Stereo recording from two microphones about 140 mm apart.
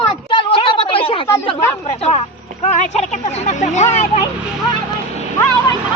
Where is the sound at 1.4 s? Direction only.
45° left (ahead or behind).